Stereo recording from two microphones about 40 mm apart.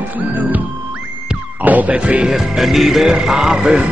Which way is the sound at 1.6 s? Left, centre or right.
Right.